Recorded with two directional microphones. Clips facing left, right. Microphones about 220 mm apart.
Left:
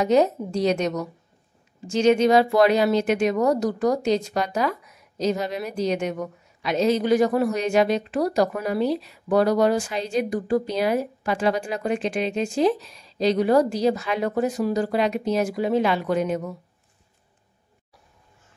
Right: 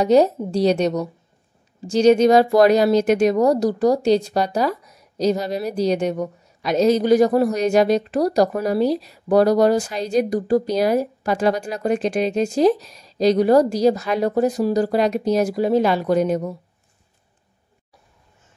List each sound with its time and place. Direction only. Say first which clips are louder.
0.0 s a woman's voice: right 4 dB; 35° right (ahead or behind)